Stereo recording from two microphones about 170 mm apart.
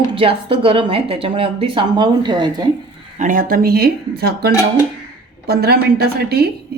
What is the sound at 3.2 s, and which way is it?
Speech, 50° right (ahead or behind).